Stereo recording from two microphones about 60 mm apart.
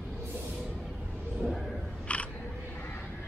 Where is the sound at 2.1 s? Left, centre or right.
Left.